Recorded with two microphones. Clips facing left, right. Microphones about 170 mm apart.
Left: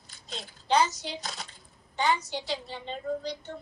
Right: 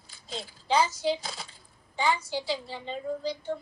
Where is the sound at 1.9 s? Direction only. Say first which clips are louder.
Even; 5° right (ahead or behind).